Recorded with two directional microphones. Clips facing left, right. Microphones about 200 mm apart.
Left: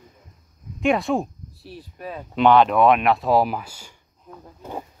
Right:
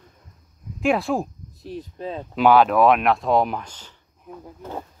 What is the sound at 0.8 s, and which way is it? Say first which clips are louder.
Speech: left 1 dB; centre (ahead or behind).